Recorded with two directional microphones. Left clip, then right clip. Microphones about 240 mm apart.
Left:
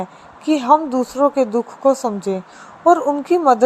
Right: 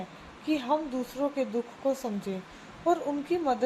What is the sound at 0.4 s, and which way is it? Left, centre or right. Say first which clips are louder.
A woman's voice: left 14 dB; left.